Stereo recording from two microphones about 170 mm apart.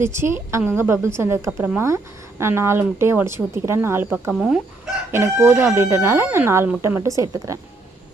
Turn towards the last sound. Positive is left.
turn(degrees=-20)  # may be behind; listen again after turning